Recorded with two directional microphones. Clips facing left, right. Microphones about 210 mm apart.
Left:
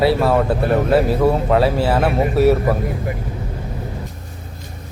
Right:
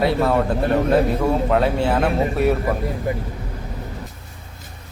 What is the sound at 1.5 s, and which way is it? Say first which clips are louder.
Speech: left 2 dB; 5° left (ahead or behind).